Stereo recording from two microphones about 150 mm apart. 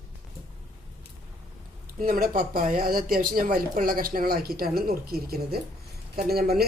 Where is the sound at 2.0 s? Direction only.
70° right (ahead or behind).